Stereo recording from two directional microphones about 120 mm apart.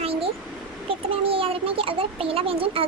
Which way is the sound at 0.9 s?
50° right (ahead or behind).